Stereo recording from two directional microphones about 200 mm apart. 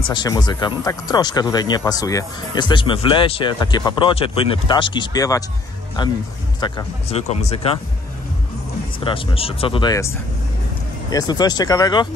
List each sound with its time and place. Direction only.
0.1 s speech: 20° left (ahead or behind)
7.1 s speech: 35° left (ahead or behind)
9.0 s speech: 25° left (ahead or behind)